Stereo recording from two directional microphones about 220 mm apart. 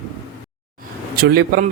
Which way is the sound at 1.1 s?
45° right (ahead or behind).